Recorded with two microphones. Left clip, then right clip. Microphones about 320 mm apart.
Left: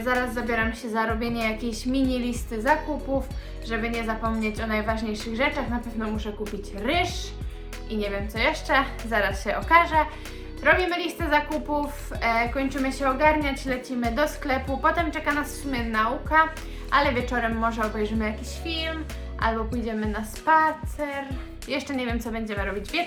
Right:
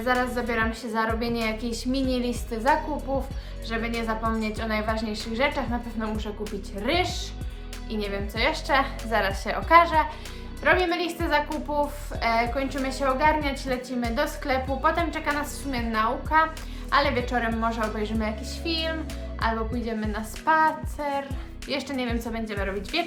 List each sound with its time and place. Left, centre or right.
0.0 s a woman's voice: centre